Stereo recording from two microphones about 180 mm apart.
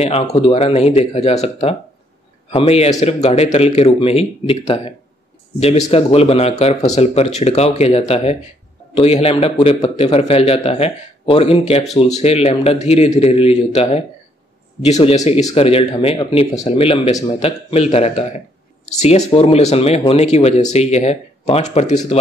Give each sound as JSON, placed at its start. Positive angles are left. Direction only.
{"t": 0.0, "sound": "a man's voice", "side_deg": 35}